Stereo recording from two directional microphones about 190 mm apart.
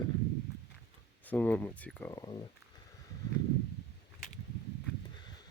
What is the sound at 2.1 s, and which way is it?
Speech, 20° left (ahead or behind).